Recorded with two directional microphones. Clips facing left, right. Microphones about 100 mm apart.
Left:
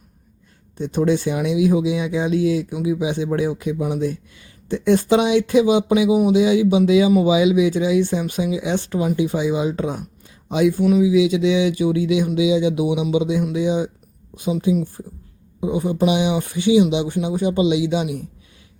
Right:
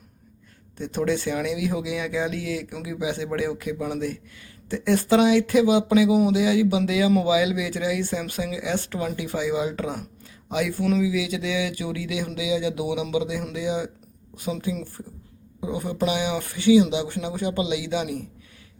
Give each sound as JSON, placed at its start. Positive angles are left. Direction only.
{"t": 0.8, "sound": "a woman's voice", "side_deg": 20}
{"t": 11.1, "sound": "a woman's voice", "side_deg": 20}